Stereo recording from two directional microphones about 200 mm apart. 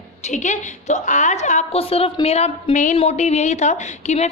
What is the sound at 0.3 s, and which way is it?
A woman's voice, 35° left (ahead or behind).